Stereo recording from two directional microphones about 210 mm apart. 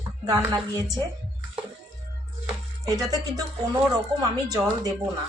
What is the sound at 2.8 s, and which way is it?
Speech, 20° right (ahead or behind).